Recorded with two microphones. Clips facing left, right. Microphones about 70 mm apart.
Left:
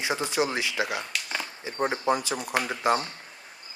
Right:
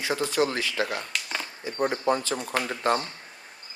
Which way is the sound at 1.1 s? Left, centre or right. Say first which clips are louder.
Even; centre.